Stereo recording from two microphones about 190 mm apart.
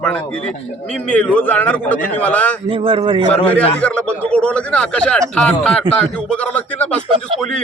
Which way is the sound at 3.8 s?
5° left (ahead or behind).